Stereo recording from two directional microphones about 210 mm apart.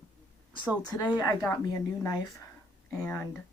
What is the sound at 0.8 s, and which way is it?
Speech, 20° left (ahead or behind).